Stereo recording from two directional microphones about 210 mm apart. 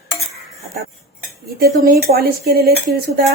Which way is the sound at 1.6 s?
45° right (ahead or behind).